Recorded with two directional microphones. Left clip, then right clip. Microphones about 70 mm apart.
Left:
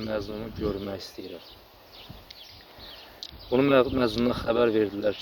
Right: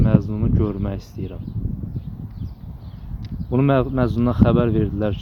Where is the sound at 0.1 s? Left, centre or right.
Right.